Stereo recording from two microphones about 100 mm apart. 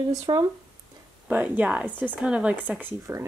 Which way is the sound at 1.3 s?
15° right (ahead or behind).